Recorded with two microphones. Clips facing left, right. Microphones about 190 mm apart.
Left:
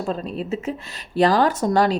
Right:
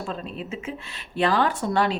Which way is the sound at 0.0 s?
40° left (ahead or behind).